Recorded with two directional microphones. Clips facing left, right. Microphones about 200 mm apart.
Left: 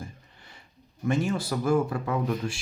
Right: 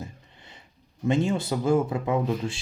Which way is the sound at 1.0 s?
20° right (ahead or behind).